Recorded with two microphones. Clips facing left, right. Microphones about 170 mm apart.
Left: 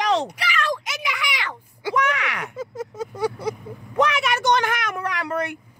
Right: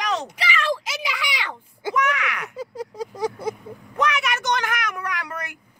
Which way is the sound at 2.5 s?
35° right (ahead or behind).